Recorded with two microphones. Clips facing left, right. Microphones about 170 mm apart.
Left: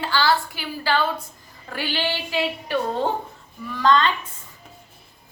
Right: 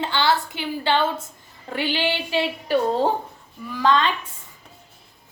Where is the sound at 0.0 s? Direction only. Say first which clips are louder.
Even; 20° right (ahead or behind).